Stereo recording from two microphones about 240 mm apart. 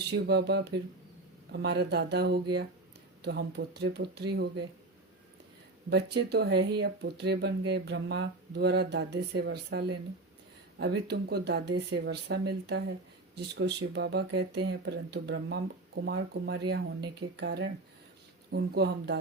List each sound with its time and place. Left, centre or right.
0.1 s speech: right
5.9 s speech: right